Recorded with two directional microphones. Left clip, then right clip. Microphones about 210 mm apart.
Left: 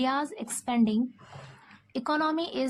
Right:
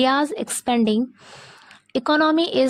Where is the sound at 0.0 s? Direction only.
45° right (ahead or behind).